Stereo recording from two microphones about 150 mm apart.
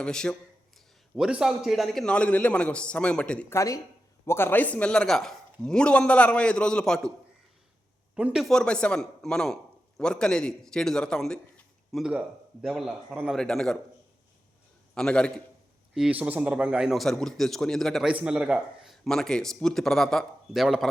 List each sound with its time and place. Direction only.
0.0 s a man's voice: 5° left (ahead or behind)
3.5 s a man's voice: 20° left (ahead or behind); by 7.1 s 5° left (ahead or behind)
8.1 s a man's voice: 5° right (ahead or behind)
14.9 s a man's voice: 5° left (ahead or behind)
16.0 s a man's voice: 5° right (ahead or behind)